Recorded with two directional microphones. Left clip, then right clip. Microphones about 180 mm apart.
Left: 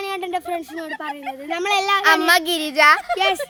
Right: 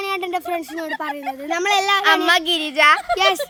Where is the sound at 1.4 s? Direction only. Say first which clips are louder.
Right 1 dB; 30° right (ahead or behind).